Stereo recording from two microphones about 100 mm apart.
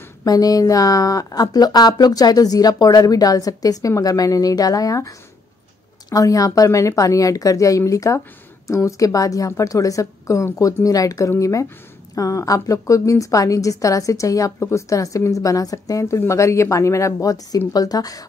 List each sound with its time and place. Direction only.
0.2 s a woman's voice: 40° left (ahead or behind)